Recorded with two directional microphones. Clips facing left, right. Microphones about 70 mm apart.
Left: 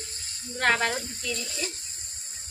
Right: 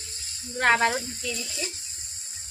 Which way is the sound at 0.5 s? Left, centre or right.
Centre.